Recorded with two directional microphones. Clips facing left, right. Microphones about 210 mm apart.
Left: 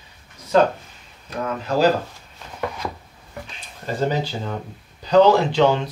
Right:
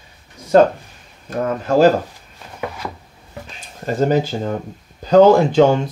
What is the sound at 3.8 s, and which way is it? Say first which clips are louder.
Speech: right 6 dB; 45° right (ahead or behind).